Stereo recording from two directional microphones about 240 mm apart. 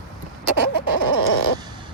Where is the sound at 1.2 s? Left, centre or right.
Left.